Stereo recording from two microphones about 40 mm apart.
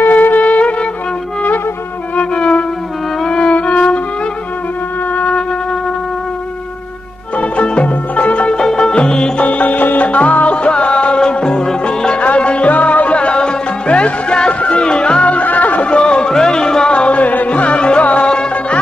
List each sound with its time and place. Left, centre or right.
0.0 s music: left
2.3 s music: left
7.3 s music: left
8.5 s music: centre
9.4 s music: left
11.1 s music: centre
12.2 s middle eastern music: left
12.7 s music: left
14.8 s music: left
15.3 s music: left
15.9 s music: left
16.9 s music: left
17.5 s music: left